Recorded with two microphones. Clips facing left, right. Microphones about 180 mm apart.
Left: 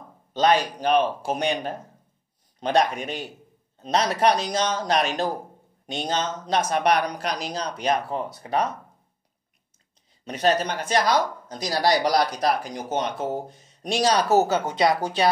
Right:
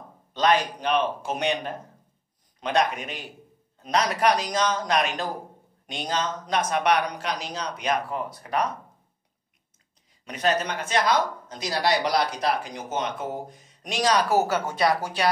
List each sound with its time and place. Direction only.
0.3 s speech: 30° left (ahead or behind)
10.2 s speech: 30° left (ahead or behind)